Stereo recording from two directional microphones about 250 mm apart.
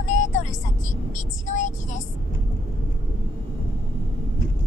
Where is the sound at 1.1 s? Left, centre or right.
Left.